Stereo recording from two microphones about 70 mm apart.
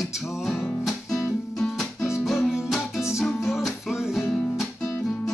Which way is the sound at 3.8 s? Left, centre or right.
Centre.